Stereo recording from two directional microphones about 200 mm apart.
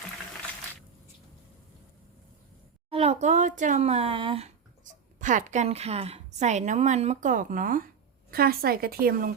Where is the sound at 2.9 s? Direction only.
30° right (ahead or behind); by 9.3 s 50° right (ahead or behind).